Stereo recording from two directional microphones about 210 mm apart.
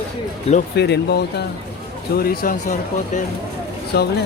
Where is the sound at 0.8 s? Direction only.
55° left (ahead or behind).